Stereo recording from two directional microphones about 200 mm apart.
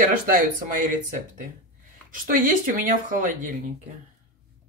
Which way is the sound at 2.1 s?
45° right (ahead or behind).